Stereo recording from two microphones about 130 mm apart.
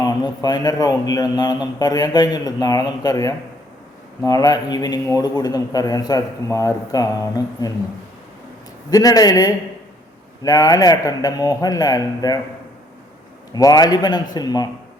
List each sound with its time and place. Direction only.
0.0 s a man's voice: 30° left (ahead or behind)
8.9 s a man's voice: 30° left (ahead or behind)
13.5 s a man's voice: 30° left (ahead or behind)